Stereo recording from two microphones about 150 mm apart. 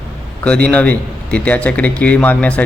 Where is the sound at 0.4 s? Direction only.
10° left (ahead or behind).